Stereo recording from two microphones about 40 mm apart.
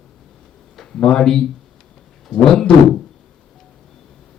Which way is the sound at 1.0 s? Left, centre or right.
Centre.